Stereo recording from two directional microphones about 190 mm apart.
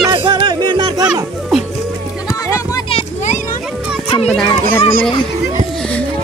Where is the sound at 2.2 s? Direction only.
15° left (ahead or behind).